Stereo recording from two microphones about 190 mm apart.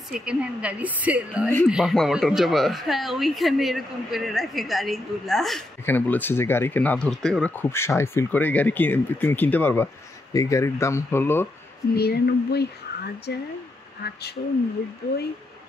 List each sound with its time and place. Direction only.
0.1 s a woman's voice: 5° right (ahead or behind); by 11.4 s 10° left (ahead or behind)
11.9 s speech: 55° left (ahead or behind)